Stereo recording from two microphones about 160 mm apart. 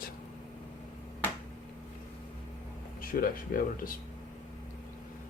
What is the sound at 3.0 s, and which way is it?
Speech, 60° left (ahead or behind).